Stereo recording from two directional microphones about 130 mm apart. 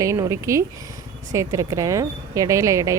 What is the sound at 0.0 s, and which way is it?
Speech, 25° right (ahead or behind).